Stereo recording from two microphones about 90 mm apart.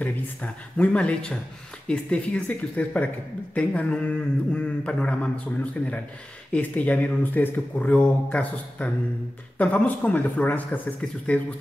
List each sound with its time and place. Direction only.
0.0 s a man's voice: 15° left (ahead or behind)